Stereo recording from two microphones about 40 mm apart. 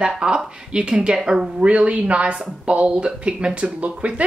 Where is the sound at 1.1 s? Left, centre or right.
Centre.